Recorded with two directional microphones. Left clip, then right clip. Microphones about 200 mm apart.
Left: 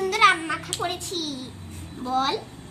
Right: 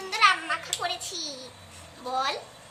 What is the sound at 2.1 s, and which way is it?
Speech, 15° left (ahead or behind).